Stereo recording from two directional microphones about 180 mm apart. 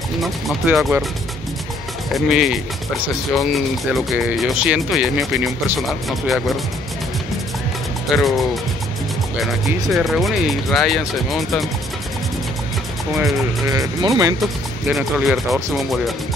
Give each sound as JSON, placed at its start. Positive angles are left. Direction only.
{"t": 0.2, "sound": "speech", "side_deg": 0}
{"t": 2.1, "sound": "speech", "side_deg": 0}
{"t": 3.9, "sound": "speech", "side_deg": 0}
{"t": 8.1, "sound": "speech", "side_deg": 0}
{"t": 9.7, "sound": "speech", "side_deg": 0}
{"t": 13.7, "sound": "speech", "side_deg": -20}
{"t": 14.4, "sound": "speech", "side_deg": 0}